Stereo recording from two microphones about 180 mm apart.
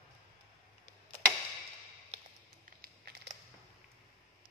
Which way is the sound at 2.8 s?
65° right (ahead or behind).